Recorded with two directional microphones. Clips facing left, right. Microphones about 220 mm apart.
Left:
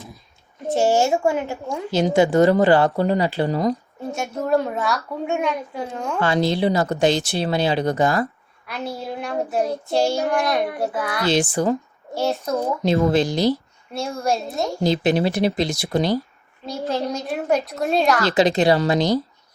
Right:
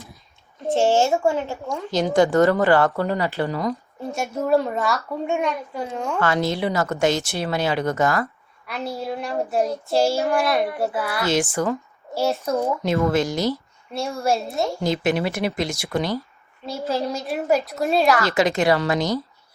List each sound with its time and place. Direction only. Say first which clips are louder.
0.7 s a child's voice: even; 15° left (ahead or behind)
2.6 s speech: left 2 dB; 30° left (ahead or behind)
3.3 s speech: left 3 dB; 30° left (ahead or behind)
4.1 s child singing: right 1 dB; 5° right (ahead or behind)
6.1 s speech: left 3 dB; 30° left (ahead or behind)
8.6 s child singing: right 1 dB; centre (ahead or behind)
11.3 s speech: left 3 dB; 30° left (ahead or behind)
12.1 s child singing: even; 5° right (ahead or behind)
13.1 s speech: left 3 dB; 35° left (ahead or behind)
13.9 s child singing: even; centre (ahead or behind)
14.8 s speech: left 5 dB; 35° left (ahead or behind)
16.6 s child singing: even; 5° right (ahead or behind)
18.2 s speech: left 2 dB; 30° left (ahead or behind)